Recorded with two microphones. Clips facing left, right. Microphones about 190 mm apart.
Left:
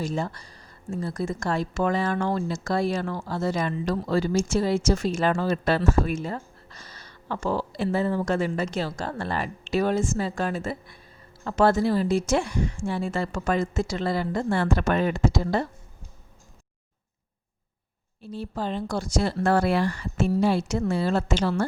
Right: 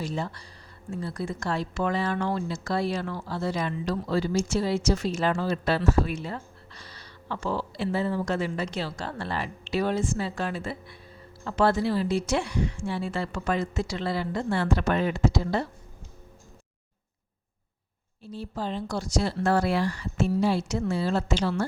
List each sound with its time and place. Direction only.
0.0 s speech: 45° left (ahead or behind)
18.2 s speech: 60° left (ahead or behind)